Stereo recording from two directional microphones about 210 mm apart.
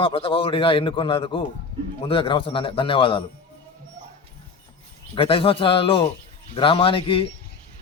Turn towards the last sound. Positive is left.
turn(degrees=25)  # may be behind; listen again after turning